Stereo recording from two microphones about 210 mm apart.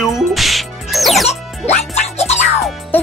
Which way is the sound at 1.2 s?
30° left (ahead or behind).